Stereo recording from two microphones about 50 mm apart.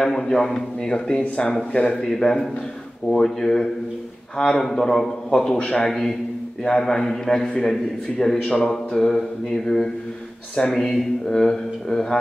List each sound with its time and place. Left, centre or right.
0.0 s a man's voice: centre